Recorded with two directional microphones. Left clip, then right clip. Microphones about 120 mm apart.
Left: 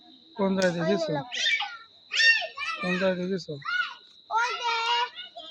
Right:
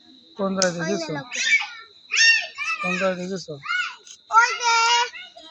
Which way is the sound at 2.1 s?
30° left (ahead or behind).